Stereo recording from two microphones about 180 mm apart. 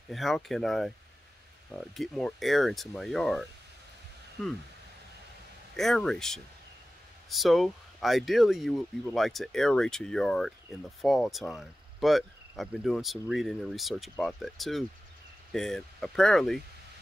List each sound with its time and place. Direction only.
0.1 s speech: centre (ahead or behind)
5.8 s speech: centre (ahead or behind)